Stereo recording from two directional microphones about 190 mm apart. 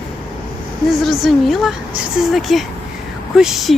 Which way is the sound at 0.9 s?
Centre (ahead or behind).